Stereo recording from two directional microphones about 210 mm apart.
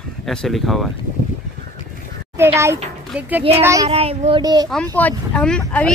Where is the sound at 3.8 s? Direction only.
30° right (ahead or behind).